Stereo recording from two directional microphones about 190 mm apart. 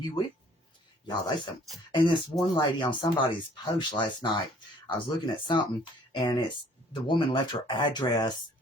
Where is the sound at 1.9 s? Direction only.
25° left (ahead or behind).